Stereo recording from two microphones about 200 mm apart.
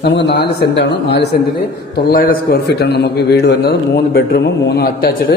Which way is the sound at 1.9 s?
45° left (ahead or behind).